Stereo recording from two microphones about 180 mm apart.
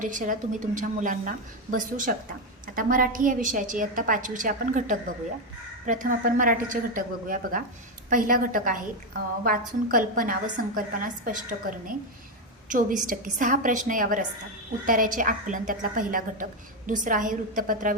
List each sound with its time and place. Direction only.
0.0 s a woman's voice: 45° right (ahead or behind)